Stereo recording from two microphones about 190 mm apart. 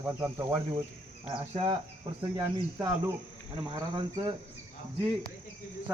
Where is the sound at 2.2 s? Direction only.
15° right (ahead or behind).